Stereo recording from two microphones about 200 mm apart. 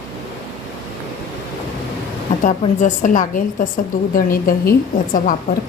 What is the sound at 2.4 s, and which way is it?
A woman's voice, 40° left (ahead or behind).